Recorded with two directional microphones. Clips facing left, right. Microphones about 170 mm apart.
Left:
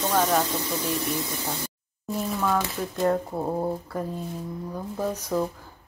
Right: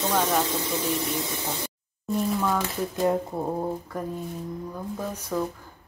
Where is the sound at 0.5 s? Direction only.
25° right (ahead or behind).